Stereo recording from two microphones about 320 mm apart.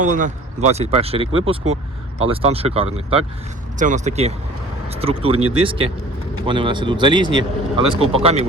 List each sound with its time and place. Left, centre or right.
0.0 s speech: right